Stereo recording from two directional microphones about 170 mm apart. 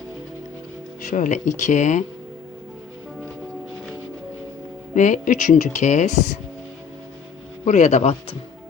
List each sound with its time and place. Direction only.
1.0 s speech: 45° left (ahead or behind)
4.9 s speech: 45° left (ahead or behind)
7.6 s speech: 45° left (ahead or behind)